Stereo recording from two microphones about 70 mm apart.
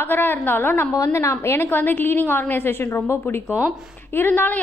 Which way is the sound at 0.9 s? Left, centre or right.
Left.